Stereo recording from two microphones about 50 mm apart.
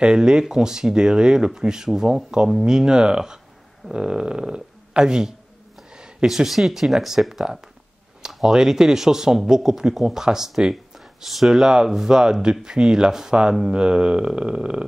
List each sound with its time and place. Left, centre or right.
0.0 s speech: centre